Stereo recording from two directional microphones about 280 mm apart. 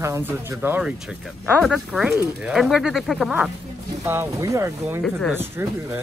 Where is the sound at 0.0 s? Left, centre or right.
Centre.